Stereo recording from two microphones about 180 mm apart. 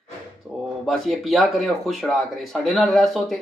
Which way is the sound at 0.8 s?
Centre (ahead or behind).